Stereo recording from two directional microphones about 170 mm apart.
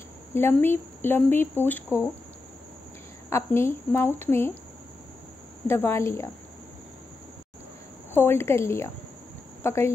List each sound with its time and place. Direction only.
0.3 s speech: 15° left (ahead or behind)
3.3 s speech: 15° left (ahead or behind)
5.7 s speech: 15° left (ahead or behind)
8.1 s speech: 15° left (ahead or behind)